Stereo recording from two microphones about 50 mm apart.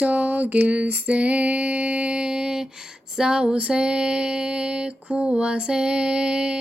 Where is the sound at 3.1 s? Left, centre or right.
Centre.